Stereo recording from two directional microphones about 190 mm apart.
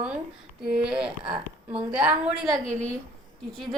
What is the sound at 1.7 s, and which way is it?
Speech, 5° right (ahead or behind).